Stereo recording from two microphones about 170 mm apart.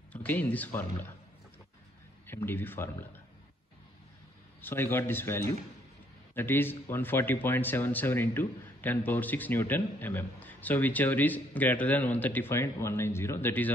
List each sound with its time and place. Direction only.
0.1 s speech: 10° left (ahead or behind)
2.2 s speech: 15° left (ahead or behind)
4.6 s speech: 10° left (ahead or behind)